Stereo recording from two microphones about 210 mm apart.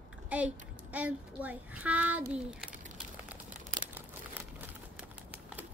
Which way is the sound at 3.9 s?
10° right (ahead or behind).